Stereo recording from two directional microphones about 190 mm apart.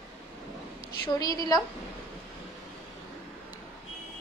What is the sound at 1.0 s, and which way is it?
Speech, 20° left (ahead or behind).